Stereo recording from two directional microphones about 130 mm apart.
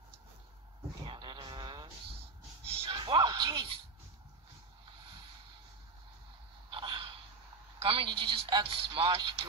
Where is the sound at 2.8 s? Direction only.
40° right (ahead or behind).